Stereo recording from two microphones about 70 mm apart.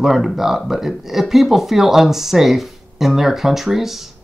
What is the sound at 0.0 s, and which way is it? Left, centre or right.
Speech, centre.